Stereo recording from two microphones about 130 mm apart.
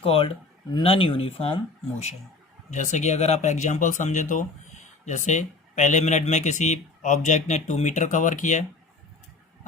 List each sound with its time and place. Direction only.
0.0 s speech: 45° left (ahead or behind)
2.6 s speech: 65° left (ahead or behind)